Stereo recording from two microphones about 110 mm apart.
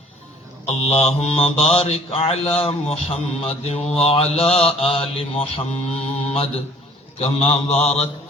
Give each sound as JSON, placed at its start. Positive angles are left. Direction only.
{"t": 1.0, "sound": "mantra", "side_deg": 65}
{"t": 7.2, "sound": "a man's voice", "side_deg": 70}